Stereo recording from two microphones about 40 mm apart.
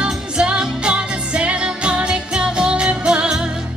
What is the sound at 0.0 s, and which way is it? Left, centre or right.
Music, right.